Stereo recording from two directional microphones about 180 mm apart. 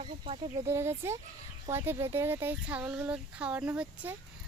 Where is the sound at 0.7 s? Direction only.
15° right (ahead or behind).